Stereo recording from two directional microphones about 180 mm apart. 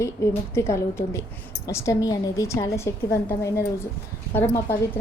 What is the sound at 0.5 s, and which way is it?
A woman's voice, 15° left (ahead or behind).